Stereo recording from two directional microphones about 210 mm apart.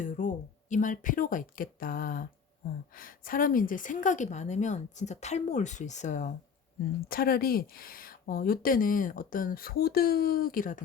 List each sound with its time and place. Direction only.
0.0 s a woman's voice: 40° left (ahead or behind)